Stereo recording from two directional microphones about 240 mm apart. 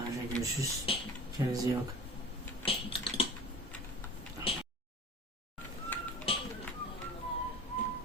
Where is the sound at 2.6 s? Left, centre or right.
Left.